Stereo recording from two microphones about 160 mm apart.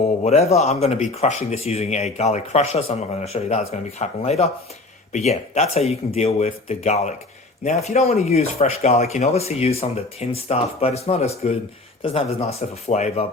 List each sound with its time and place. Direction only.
0.3 s speech: 40° left (ahead or behind)